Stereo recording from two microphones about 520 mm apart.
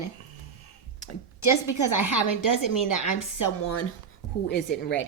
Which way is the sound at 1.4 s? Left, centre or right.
Left.